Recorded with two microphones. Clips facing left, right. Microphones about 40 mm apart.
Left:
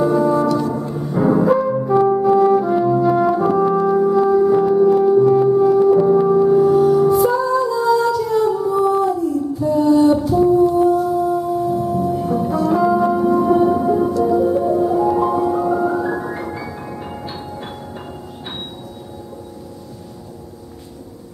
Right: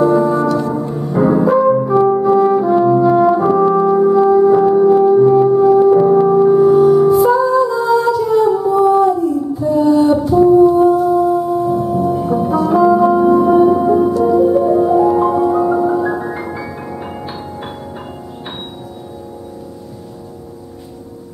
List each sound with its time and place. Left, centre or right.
0.0 s music: centre
1.1 s music: centre
1.4 s brass instrument: centre
3.5 s music: centre
11.6 s singing bowl: centre
12.2 s music: centre
12.7 s music: centre